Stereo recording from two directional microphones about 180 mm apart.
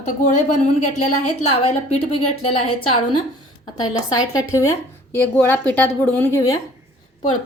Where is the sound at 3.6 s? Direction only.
20° left (ahead or behind).